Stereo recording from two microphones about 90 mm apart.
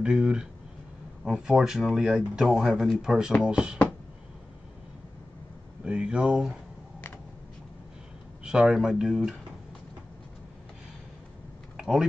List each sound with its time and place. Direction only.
0.0 s speech: 10° right (ahead or behind)
5.9 s speech: 10° right (ahead or behind)
8.5 s speech: 5° right (ahead or behind)
11.7 s a sound: 5° right (ahead or behind)